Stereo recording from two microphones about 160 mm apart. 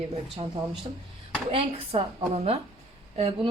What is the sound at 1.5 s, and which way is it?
A woman's voice, 35° right (ahead or behind).